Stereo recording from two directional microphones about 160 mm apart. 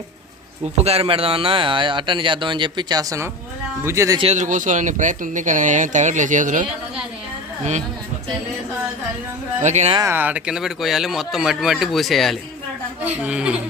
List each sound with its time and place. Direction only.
0.8 s a woman's voice: 40° right (ahead or behind); by 4.2 s 15° right (ahead or behind)
4.2 s speech: 45° right (ahead or behind)
9.6 s speech: 45° right (ahead or behind)
10.1 s a woman's voice: 10° right (ahead or behind)